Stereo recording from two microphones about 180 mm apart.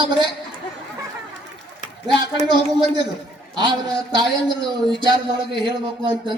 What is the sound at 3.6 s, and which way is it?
Speech, 25° right (ahead or behind).